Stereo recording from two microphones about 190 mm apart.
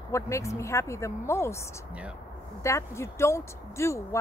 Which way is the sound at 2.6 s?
15° left (ahead or behind).